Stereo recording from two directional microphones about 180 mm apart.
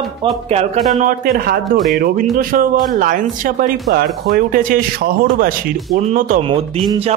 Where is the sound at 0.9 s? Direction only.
50° right (ahead or behind).